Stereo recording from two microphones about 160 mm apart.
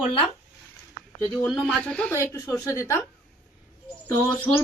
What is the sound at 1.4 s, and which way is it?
Speech, centre (ahead or behind).